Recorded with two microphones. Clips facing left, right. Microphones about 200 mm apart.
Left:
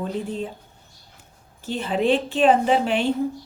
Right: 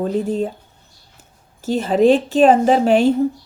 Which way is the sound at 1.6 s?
40° right (ahead or behind).